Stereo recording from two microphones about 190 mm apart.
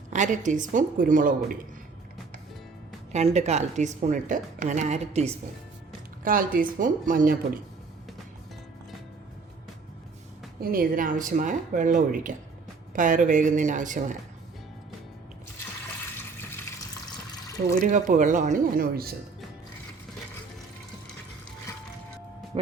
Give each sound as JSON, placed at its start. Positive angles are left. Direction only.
{"t": 0.1, "sound": "speech", "side_deg": -40}
{"t": 3.1, "sound": "speech", "side_deg": -35}
{"t": 6.2, "sound": "speech", "side_deg": -45}
{"t": 10.6, "sound": "speech", "side_deg": -50}
{"t": 16.1, "sound": "water", "side_deg": 10}
{"t": 17.8, "sound": "speech", "side_deg": -40}